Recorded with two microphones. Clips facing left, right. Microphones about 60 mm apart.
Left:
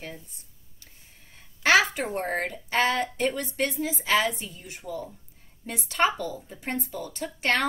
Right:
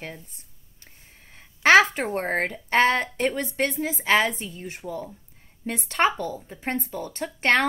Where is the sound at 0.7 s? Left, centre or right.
Right.